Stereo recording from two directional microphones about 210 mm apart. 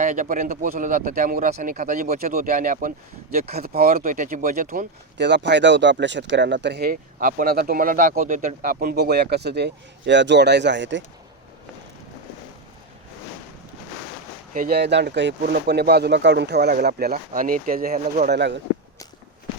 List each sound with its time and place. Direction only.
0.0 s speech: 35° right (ahead or behind)
5.1 s speech: 55° right (ahead or behind)
14.5 s speech: 45° right (ahead or behind)